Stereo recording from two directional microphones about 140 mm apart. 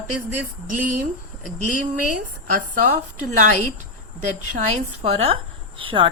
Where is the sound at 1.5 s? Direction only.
65° right (ahead or behind).